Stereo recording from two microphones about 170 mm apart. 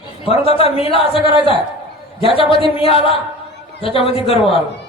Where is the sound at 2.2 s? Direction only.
35° left (ahead or behind).